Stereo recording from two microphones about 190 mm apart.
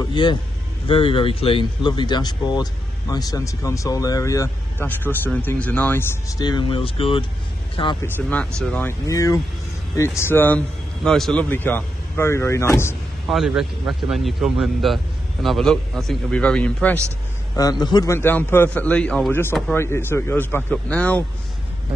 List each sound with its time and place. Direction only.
0.1 s speech: 25° left (ahead or behind)
8.0 s a man's voice: 10° left (ahead or behind)
13.3 s a man's voice: centre (ahead or behind)
17.6 s a man's voice: 20° left (ahead or behind)